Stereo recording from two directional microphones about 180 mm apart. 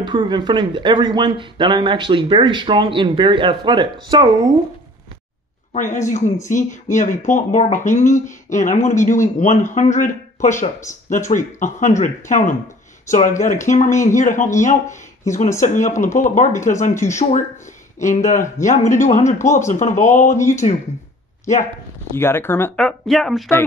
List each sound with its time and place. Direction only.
0.0 s speech: 25° right (ahead or behind)
5.7 s speech: 45° left (ahead or behind)
22.1 s speech: 15° left (ahead or behind)